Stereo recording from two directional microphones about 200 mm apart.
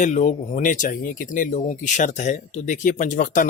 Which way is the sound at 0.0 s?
35° left (ahead or behind).